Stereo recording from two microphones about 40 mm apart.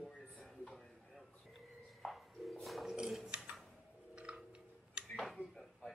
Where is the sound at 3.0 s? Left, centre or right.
Centre.